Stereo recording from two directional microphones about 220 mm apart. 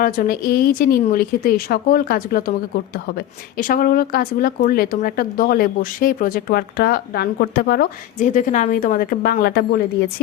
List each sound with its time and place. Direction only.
0.0 s speech: 40° left (ahead or behind)